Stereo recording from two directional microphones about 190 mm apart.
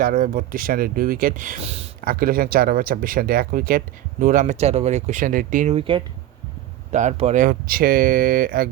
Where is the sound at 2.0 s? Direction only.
50° right (ahead or behind); by 6.0 s 30° right (ahead or behind).